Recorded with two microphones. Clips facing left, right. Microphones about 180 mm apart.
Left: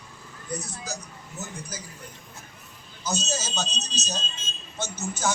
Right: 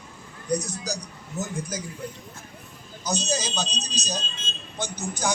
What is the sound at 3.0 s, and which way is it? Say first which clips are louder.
Speech: right 3 dB; 15° right (ahead or behind).